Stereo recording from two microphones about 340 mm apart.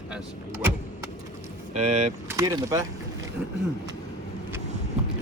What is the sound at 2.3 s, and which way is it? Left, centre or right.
Speech, centre.